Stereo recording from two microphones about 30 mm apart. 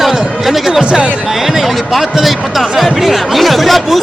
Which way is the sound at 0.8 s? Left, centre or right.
Right.